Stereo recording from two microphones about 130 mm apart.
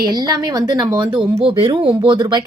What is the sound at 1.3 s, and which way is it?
A woman's voice, 45° right (ahead or behind).